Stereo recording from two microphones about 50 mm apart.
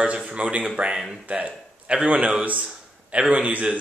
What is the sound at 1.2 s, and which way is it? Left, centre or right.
Speech, right.